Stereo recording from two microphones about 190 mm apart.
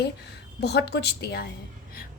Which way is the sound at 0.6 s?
60° left (ahead or behind).